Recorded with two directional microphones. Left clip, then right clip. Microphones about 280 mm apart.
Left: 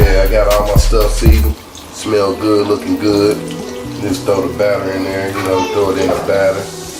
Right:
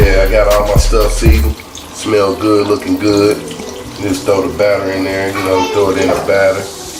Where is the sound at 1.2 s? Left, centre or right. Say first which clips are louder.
Right 2 dB; centre.